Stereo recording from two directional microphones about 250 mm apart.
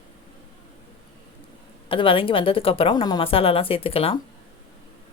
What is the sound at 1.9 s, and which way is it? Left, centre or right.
Speech, left.